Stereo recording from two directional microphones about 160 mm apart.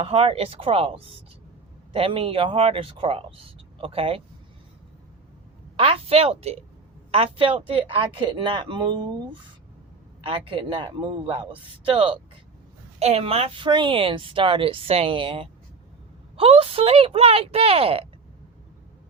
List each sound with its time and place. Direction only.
0.0 s a woman's voice: 35° right (ahead or behind)
5.7 s a woman's voice: 35° right (ahead or behind)
10.2 s a woman's voice: 35° right (ahead or behind)